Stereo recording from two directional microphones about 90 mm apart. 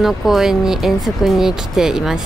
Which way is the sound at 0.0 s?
5° right (ahead or behind).